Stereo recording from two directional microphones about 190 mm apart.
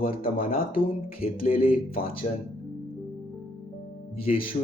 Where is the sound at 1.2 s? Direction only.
50° left (ahead or behind).